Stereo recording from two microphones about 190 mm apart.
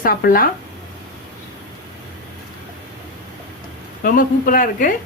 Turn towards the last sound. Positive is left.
turn(degrees=45)  # may be behind; listen again after turning